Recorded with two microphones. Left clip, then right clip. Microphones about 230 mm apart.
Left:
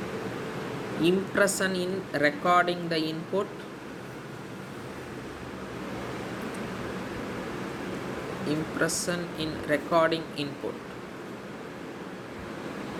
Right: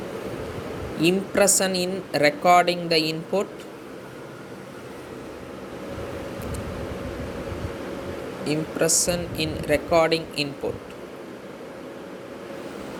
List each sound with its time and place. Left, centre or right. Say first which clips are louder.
1.0 s a woman's voice: right 4 dB; centre
8.4 s a woman's voice: right 5 dB; centre